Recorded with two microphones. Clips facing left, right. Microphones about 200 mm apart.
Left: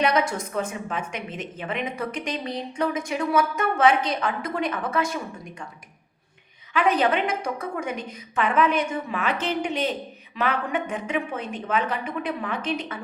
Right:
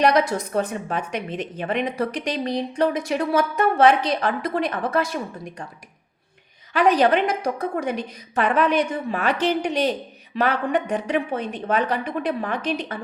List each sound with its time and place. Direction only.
0.0 s a woman's voice: 35° right (ahead or behind)
6.7 s a woman's voice: 35° right (ahead or behind)